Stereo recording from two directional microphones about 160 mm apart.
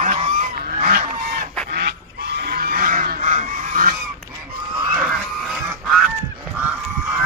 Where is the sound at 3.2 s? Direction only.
45° right (ahead or behind).